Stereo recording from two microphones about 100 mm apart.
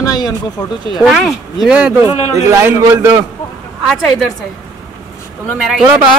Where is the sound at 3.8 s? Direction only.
Centre (ahead or behind).